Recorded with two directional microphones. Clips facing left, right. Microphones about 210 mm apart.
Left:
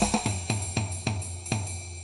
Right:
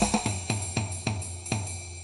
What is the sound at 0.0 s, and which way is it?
Drum kit, centre (ahead or behind).